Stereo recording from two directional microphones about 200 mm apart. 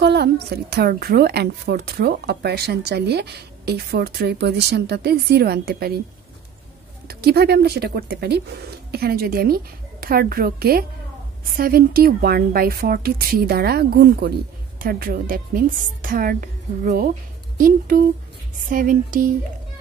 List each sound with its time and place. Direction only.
0.0 s a woman's voice: 55° right (ahead or behind)
7.1 s speech: 55° right (ahead or behind)